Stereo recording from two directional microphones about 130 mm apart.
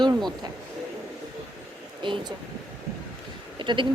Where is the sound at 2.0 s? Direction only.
40° right (ahead or behind).